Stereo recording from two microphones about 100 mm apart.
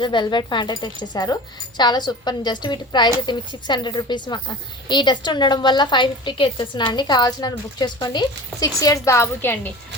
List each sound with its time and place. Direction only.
0.0 s a woman's voice: 50° left (ahead or behind); by 9.6 s 25° left (ahead or behind)